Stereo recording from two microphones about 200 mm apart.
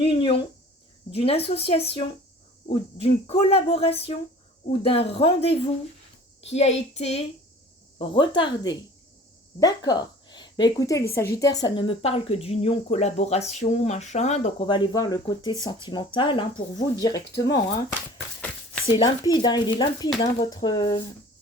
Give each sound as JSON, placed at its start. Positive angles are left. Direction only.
{"t": 0.0, "sound": "a sound", "side_deg": 25}
{"t": 1.1, "sound": "a woman's voice", "side_deg": 30}
{"t": 14.9, "sound": "speech", "side_deg": 20}
{"t": 18.9, "sound": "speech", "side_deg": 20}